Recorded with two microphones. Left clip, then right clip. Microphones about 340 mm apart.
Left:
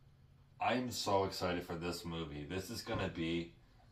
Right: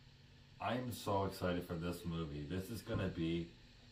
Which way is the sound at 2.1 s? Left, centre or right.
Left.